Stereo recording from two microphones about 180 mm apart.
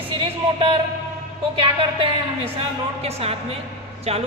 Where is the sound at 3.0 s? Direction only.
35° right (ahead or behind).